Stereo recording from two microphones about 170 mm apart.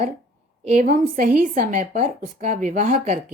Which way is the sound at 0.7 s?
50° right (ahead or behind).